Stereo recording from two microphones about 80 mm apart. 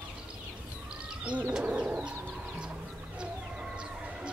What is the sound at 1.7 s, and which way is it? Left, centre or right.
Bird, centre.